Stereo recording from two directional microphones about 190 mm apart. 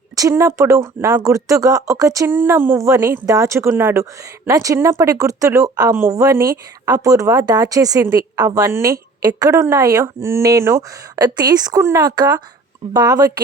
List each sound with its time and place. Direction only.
0.2 s speech: 15° right (ahead or behind)